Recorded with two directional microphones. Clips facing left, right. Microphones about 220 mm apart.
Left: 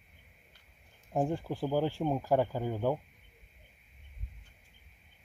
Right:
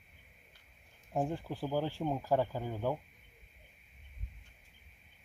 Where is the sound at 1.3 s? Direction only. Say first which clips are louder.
Left 4 dB; 15° left (ahead or behind).